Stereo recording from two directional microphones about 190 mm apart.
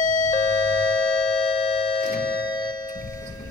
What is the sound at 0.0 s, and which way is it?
Doorbell, 40° left (ahead or behind).